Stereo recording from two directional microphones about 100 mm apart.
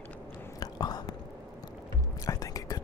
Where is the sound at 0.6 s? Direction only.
45° left (ahead or behind).